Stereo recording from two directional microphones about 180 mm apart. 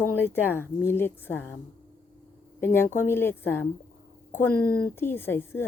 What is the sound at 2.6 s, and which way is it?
Speech, 15° left (ahead or behind).